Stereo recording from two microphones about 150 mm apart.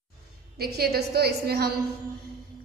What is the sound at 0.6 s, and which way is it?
A woman's voice, 90° right.